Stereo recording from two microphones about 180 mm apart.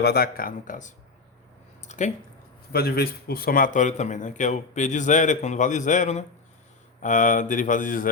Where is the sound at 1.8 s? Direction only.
45° left (ahead or behind).